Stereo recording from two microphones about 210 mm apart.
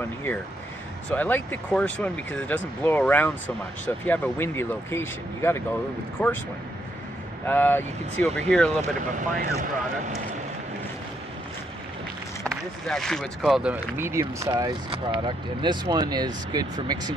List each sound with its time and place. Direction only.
1.1 s speech: 10° left (ahead or behind)
7.4 s speech: 10° left (ahead or behind)
9.1 s speech: 35° right (ahead or behind)
12.4 s speech: 5° left (ahead or behind); by 17.1 s 20° right (ahead or behind)